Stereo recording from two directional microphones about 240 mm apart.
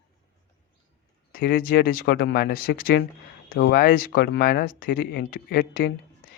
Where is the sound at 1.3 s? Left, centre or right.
Left.